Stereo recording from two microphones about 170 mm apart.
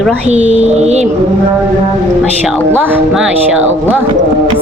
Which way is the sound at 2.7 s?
5° right (ahead or behind).